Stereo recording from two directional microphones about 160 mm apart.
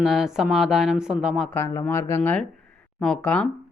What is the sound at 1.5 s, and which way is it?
Speech, 15° left (ahead or behind).